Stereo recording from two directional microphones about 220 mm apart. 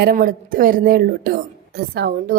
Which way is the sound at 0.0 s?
40° right (ahead or behind).